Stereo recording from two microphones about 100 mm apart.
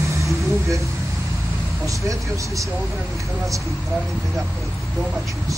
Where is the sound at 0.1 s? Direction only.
30° right (ahead or behind).